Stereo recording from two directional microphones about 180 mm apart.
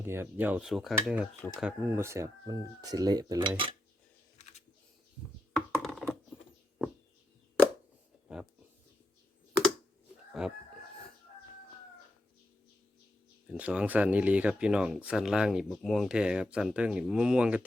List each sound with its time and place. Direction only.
0.0 s cutlery: 15° right (ahead or behind)
1.6 s speech: 15° right (ahead or behind)
5.8 s a sound: centre (ahead or behind)
10.4 s speech: 5° right (ahead or behind)
13.5 s speech: 5° right (ahead or behind)